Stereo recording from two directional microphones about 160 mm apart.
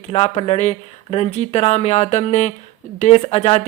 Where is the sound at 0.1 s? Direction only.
40° left (ahead or behind).